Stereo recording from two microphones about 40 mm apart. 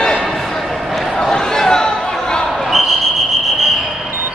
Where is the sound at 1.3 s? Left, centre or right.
Centre.